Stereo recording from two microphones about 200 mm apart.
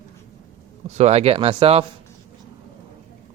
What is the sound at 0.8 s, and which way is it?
Speech, 35° right (ahead or behind).